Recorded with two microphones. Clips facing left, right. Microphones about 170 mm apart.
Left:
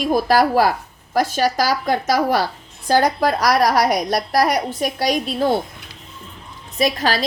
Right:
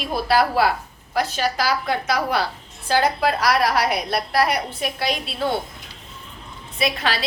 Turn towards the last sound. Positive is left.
turn(degrees=40)  # may be behind; listen again after turning